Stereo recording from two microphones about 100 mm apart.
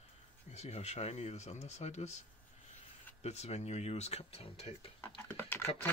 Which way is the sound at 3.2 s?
90° left.